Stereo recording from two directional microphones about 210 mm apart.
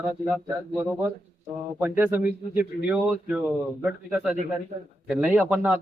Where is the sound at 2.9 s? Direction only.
5° right (ahead or behind).